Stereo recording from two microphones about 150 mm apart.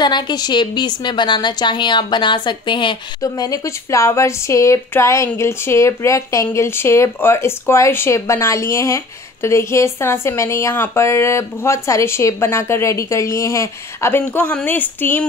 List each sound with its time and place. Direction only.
0.0 s a woman's voice: 30° left (ahead or behind); by 15.2 s 10° left (ahead or behind)